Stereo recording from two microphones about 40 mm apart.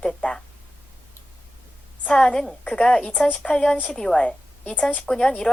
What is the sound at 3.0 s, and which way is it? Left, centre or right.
Speech, left.